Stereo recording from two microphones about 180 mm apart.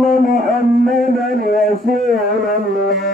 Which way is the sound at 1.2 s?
50° left (ahead or behind).